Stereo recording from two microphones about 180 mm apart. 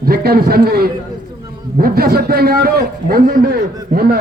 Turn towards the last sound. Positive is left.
turn(degrees=-55)  # may be behind; listen again after turning